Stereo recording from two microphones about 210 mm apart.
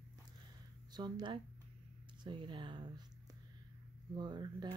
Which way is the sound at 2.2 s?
25° right (ahead or behind).